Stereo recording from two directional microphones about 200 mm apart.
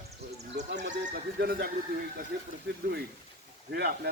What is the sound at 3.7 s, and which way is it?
Speech, 50° right (ahead or behind).